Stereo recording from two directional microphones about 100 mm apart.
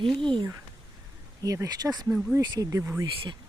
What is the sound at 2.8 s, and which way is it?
Speech, 25° right (ahead or behind).